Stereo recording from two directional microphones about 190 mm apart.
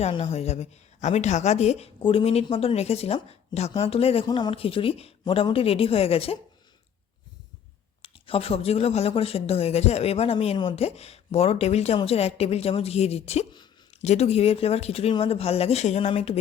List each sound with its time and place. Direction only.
0.0 s speech: 30° left (ahead or behind)
8.0 s speech: 30° left (ahead or behind)